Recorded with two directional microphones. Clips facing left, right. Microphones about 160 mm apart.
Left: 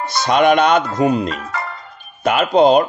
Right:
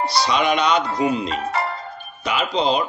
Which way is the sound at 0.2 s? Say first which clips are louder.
Left 8 dB; 50° left (ahead or behind).